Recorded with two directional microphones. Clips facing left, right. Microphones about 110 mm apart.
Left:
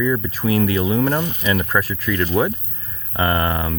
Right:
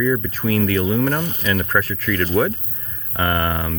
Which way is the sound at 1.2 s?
40° right (ahead or behind).